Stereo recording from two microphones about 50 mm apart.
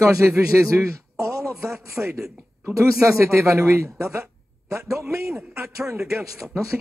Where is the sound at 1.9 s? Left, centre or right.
Right.